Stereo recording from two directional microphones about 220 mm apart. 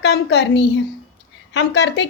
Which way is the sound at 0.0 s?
50° left (ahead or behind).